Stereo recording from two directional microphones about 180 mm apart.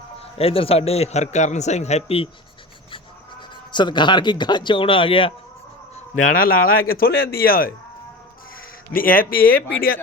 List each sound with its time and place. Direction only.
0.3 s a man's voice: 30° left (ahead or behind)
3.7 s speech: 25° left (ahead or behind)
6.1 s speech: 50° left (ahead or behind)
9.0 s speech: 50° left (ahead or behind)